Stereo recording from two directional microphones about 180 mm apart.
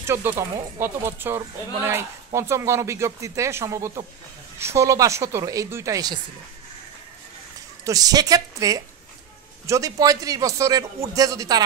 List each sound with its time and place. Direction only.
0.0 s speech: 15° right (ahead or behind)
7.8 s speech: 20° right (ahead or behind)